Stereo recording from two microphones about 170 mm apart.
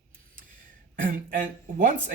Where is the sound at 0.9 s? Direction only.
55° right (ahead or behind).